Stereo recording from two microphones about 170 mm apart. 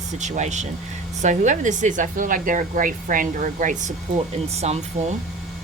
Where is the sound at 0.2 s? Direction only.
45° right (ahead or behind).